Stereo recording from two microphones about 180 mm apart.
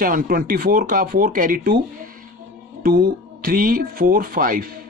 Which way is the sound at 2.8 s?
55° right (ahead or behind).